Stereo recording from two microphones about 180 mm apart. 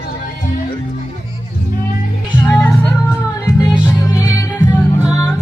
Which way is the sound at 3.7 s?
5° right (ahead or behind).